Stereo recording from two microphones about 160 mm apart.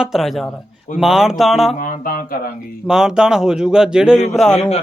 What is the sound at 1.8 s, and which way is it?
Speech, 60° left (ahead or behind).